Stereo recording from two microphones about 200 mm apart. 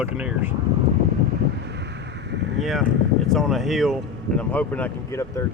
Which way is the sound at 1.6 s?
60° right (ahead or behind).